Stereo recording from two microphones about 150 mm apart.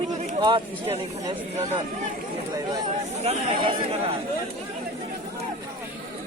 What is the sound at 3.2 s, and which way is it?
Speech, 40° right (ahead or behind).